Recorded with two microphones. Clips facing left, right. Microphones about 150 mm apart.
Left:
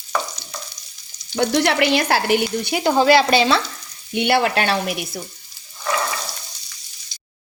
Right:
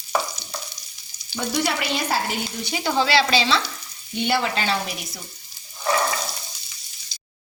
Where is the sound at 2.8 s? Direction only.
45° left (ahead or behind).